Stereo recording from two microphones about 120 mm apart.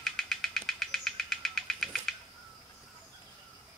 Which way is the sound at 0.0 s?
5° left (ahead or behind).